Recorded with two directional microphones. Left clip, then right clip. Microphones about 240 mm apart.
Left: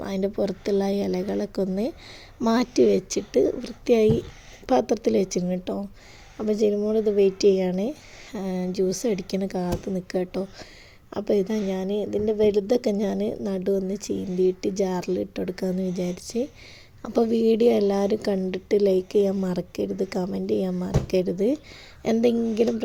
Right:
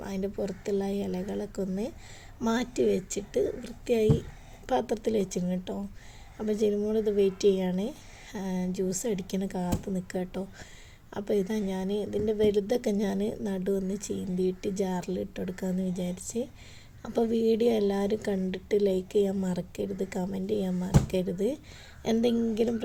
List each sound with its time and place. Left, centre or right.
0.0 s a woman's voice: left